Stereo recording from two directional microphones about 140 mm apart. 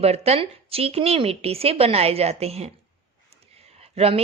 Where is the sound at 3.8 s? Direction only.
45° right (ahead or behind).